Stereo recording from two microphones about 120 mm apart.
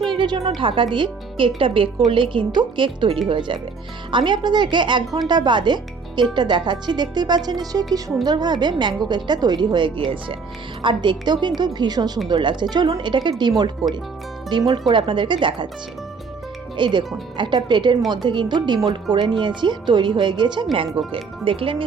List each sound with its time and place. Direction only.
0.2 s a woman's voice: 45° right (ahead or behind)
16.7 s a woman's voice: 40° right (ahead or behind)